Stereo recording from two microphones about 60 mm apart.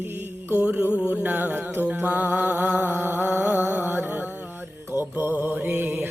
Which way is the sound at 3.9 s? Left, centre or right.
Right.